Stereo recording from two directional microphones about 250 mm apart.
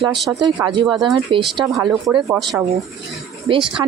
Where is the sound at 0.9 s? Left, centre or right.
Centre.